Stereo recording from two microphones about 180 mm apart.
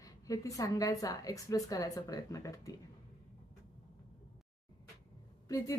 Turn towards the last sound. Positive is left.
turn(degrees=20)  # may be behind; listen again after turning